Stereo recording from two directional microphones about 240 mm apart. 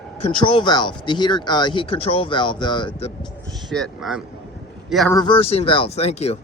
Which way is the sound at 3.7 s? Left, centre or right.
Centre.